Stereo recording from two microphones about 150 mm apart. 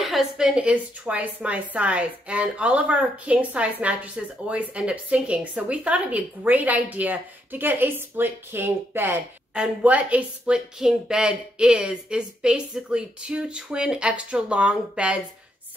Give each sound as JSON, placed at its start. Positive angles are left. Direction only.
{"t": 0.0, "sound": "a woman's voice", "side_deg": 0}